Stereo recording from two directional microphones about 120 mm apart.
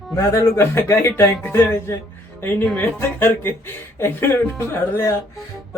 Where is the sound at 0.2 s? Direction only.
25° left (ahead or behind).